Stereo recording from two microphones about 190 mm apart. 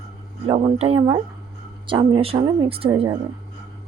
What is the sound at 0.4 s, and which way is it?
Speech, 30° right (ahead or behind).